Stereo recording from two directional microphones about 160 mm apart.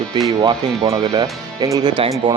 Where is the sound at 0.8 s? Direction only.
20° right (ahead or behind).